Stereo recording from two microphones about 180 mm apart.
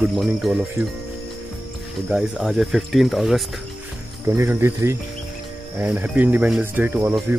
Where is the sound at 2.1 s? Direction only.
Centre (ahead or behind).